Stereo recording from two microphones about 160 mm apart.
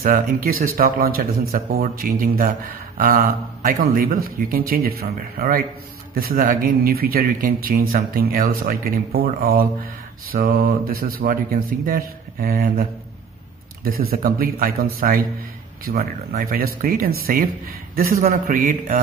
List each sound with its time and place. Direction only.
0.0 s speech: 65° right (ahead or behind)
3.6 s speech: 65° right (ahead or behind)
13.8 s speech: 65° right (ahead or behind)